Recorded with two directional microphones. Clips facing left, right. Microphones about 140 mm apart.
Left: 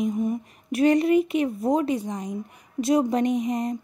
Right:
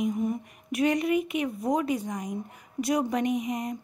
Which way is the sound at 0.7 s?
35° left (ahead or behind).